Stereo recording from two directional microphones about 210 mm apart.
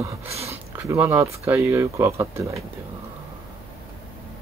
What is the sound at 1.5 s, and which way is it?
Speech, 10° right (ahead or behind).